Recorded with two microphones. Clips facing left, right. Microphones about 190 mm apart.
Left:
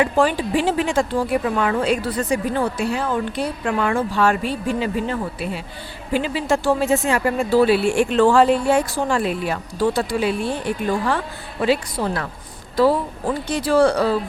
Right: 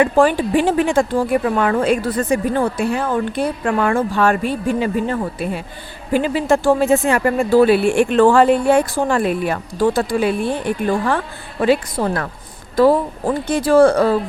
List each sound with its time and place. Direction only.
0.0 s speech: 50° right (ahead or behind)